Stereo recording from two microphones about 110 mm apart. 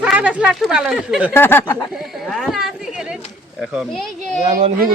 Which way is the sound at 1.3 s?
20° left (ahead or behind).